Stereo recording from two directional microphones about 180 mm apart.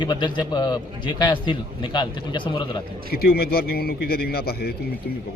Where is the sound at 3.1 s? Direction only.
60° left (ahead or behind).